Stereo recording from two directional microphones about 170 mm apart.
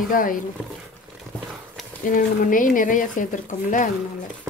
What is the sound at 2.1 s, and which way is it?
Speech, 50° left (ahead or behind).